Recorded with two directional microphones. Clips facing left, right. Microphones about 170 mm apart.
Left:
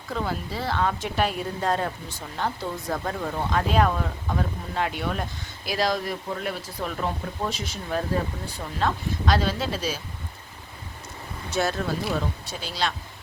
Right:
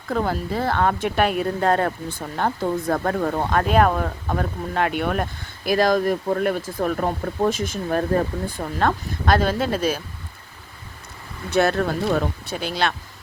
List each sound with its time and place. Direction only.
0.1 s a woman's voice: 50° right (ahead or behind)
11.5 s a woman's voice: 65° right (ahead or behind)